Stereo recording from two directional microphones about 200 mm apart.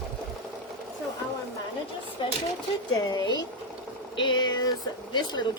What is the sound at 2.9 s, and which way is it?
A woman's voice, 20° left (ahead or behind).